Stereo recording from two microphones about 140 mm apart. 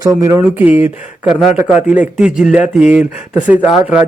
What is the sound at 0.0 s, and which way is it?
Speech, 25° right (ahead or behind).